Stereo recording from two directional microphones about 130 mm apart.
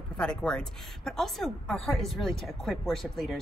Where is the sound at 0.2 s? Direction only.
5° left (ahead or behind).